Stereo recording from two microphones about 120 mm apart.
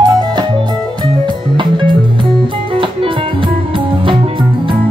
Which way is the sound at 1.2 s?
40° right (ahead or behind).